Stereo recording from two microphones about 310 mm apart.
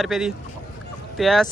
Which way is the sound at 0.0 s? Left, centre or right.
Centre.